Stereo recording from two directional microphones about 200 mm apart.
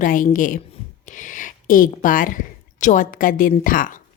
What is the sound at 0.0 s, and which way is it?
A woman's voice, 40° left (ahead or behind).